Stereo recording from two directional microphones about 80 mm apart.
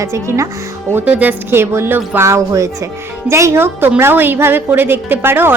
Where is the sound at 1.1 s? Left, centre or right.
Centre.